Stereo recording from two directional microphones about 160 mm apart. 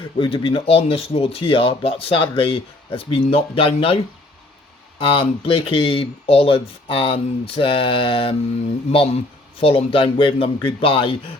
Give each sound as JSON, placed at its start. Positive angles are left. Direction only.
{"t": 0.2, "sound": "speech", "side_deg": 35}
{"t": 9.6, "sound": "speech", "side_deg": 35}